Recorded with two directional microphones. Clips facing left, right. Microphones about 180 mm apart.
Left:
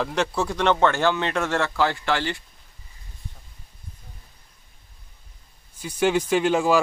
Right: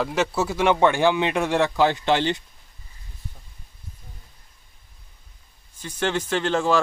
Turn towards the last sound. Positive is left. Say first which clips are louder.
# left 2 dB
turn(degrees=10)  # may be behind; listen again after turning